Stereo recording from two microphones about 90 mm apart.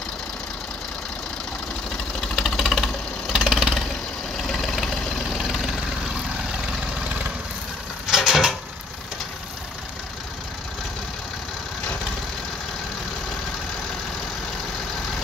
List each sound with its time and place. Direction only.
2.2 s engine knocking: centre (ahead or behind)
4.5 s engine: 5° left (ahead or behind)
5.4 s vehicle: 5° right (ahead or behind)
8.1 s a sound: 5° right (ahead or behind)